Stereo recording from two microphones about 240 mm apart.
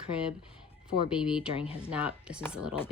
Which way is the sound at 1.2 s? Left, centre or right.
Centre.